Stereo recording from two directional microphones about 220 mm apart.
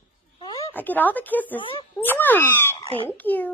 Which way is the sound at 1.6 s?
25° left (ahead or behind).